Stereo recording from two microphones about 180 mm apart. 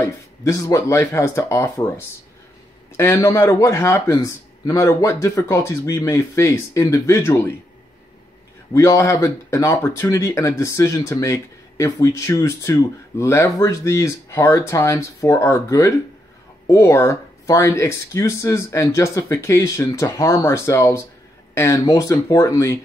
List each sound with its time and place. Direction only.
0.0 s speech: 15° left (ahead or behind)
8.7 s speech: 15° left (ahead or behind)